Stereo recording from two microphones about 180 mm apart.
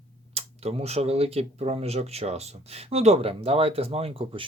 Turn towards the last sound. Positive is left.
turn(degrees=-30)  # may be behind; listen again after turning